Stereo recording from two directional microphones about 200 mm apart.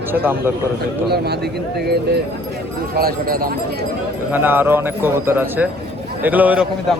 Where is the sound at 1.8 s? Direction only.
55° right (ahead or behind).